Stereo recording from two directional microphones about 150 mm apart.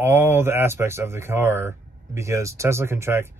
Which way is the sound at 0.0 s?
15° right (ahead or behind).